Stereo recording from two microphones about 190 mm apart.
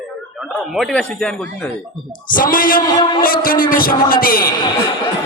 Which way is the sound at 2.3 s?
45° left (ahead or behind).